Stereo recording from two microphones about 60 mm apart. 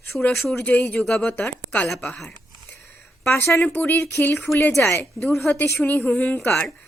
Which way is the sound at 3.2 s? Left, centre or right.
Left.